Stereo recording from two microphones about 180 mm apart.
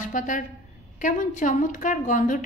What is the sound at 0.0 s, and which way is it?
A woman's voice, 45° left (ahead or behind).